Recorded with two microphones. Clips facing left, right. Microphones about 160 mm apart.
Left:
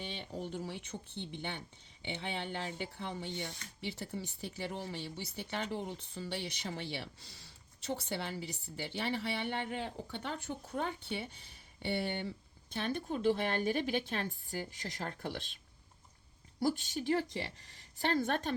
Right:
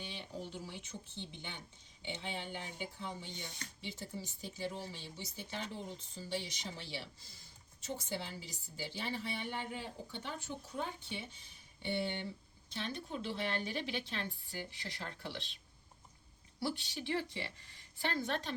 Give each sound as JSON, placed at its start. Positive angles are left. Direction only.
{"t": 0.5, "sound": "a woman's voice", "side_deg": 55}
{"t": 16.6, "sound": "a woman's voice", "side_deg": 45}